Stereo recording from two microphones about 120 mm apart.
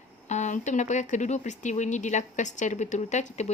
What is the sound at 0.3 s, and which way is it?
A woman's voice, 85° left.